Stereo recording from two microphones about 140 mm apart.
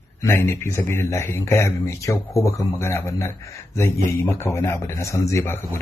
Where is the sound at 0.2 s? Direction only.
20° left (ahead or behind).